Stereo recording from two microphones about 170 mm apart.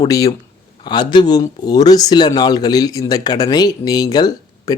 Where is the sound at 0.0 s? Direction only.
20° left (ahead or behind).